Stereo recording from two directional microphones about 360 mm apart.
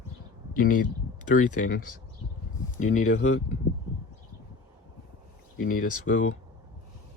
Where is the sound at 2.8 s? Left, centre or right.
Left.